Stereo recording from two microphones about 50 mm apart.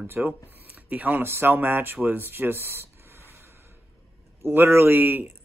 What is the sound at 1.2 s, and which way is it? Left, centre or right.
Speech, right.